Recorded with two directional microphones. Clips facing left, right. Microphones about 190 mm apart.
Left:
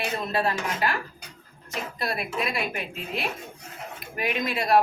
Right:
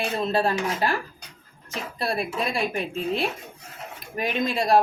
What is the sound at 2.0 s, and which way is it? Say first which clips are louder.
Speech: right 3 dB; 30° right (ahead or behind).